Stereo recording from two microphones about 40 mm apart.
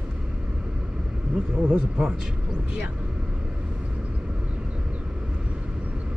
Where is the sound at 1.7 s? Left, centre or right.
Right.